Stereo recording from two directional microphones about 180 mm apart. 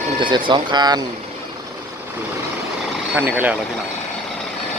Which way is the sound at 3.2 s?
10° right (ahead or behind).